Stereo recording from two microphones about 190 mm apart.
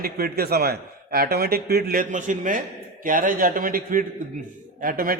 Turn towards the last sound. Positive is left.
turn(degrees=-50)  # may be behind; listen again after turning